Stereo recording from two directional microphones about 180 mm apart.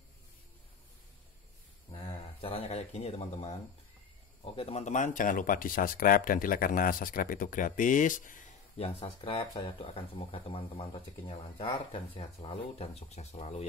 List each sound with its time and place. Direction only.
1.9 s speech: 30° left (ahead or behind)
4.6 s speech: 35° left (ahead or behind)
8.8 s speech: 30° left (ahead or behind)